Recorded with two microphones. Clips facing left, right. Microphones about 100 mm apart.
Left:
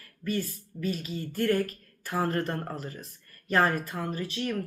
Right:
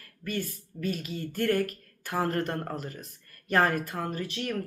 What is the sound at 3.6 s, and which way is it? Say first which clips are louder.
Speech: even; 35° left (ahead or behind).